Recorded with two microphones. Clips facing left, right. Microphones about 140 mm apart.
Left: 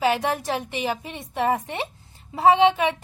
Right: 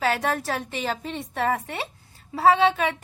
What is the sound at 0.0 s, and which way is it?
A woman's voice, 15° left (ahead or behind).